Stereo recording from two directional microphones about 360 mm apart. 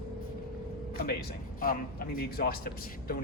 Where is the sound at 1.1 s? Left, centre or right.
Left.